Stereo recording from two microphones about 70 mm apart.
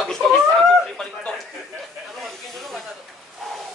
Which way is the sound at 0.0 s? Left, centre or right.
Centre.